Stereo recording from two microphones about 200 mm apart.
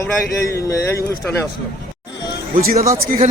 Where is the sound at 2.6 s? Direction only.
45° right (ahead or behind).